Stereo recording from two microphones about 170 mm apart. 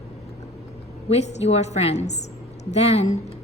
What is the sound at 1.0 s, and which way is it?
A woman's voice, 40° left (ahead or behind).